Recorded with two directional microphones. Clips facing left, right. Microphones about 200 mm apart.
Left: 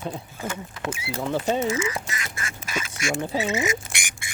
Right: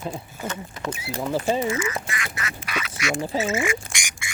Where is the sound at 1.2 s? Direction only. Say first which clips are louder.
Right 1 dB; 5° right (ahead or behind).